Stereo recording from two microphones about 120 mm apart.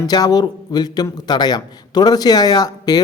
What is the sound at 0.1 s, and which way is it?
A man's voice, 35° left (ahead or behind).